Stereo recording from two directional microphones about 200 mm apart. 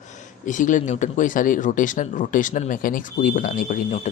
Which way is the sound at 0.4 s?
40° left (ahead or behind).